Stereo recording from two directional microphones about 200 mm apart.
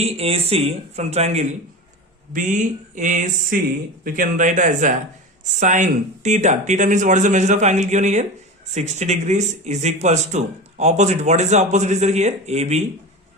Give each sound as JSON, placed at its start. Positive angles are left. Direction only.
{"t": 0.0, "sound": "speech", "side_deg": -30}